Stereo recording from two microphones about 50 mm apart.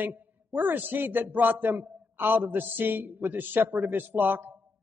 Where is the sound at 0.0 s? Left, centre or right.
Right.